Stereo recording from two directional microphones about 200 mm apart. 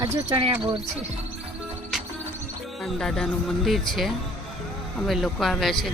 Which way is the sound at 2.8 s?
Centre (ahead or behind).